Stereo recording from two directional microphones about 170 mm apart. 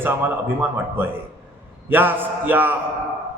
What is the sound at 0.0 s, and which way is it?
A man's voice, 10° right (ahead or behind).